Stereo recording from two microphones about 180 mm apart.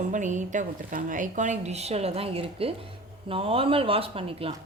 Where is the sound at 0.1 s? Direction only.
45° right (ahead or behind).